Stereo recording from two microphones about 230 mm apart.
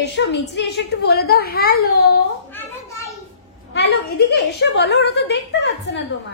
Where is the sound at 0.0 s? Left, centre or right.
Left.